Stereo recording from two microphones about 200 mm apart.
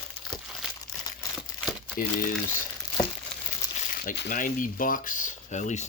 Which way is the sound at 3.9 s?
45° left (ahead or behind).